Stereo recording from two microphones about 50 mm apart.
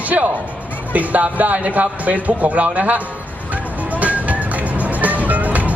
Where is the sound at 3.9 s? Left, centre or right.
Right.